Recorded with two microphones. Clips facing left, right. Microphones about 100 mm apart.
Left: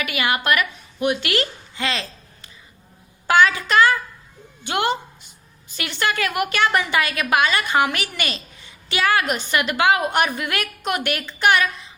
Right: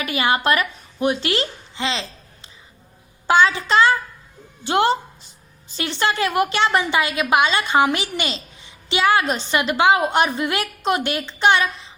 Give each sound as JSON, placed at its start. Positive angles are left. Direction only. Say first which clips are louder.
{"t": 0.0, "sound": "a woman's voice", "louder": "right 3 dB", "side_deg": -30}